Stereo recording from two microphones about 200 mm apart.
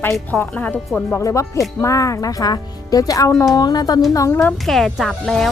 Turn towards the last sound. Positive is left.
turn(degrees=0)  # may be behind; listen again after turning